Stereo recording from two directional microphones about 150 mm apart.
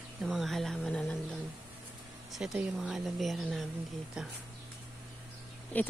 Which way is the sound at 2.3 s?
5° right (ahead or behind).